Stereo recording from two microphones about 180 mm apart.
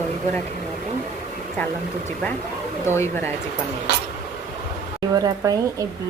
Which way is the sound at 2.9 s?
15° left (ahead or behind).